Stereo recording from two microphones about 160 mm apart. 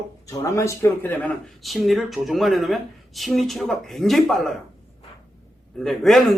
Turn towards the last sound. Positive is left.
turn(degrees=0)  # may be behind; listen again after turning